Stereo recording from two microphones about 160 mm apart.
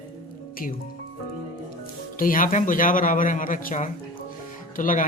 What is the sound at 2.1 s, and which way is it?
Speech, 60° left (ahead or behind).